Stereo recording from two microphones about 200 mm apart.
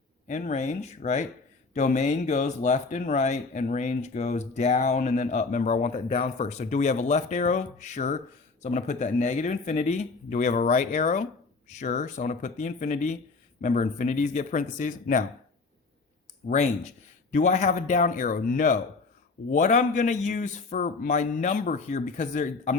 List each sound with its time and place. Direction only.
0.3 s speech: 35° left (ahead or behind)
16.4 s speech: 40° left (ahead or behind)